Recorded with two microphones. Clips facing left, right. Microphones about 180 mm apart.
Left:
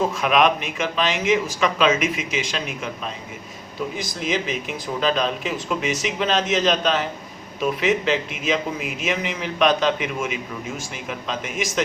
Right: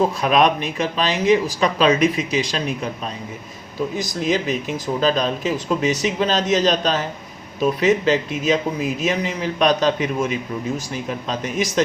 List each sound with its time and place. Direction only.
0.2 s speech: 35° right (ahead or behind)
3.9 s speech: 40° right (ahead or behind)